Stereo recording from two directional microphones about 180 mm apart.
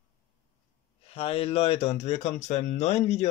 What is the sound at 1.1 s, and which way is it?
Speech, 30° left (ahead or behind).